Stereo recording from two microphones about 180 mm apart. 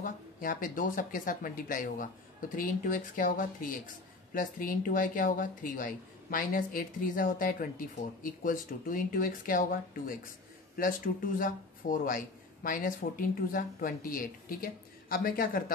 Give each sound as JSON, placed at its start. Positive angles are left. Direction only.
{"t": 0.0, "sound": "speech", "side_deg": 50}